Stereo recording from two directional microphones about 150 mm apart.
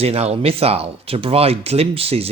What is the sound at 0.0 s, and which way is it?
Speech, 45° right (ahead or behind).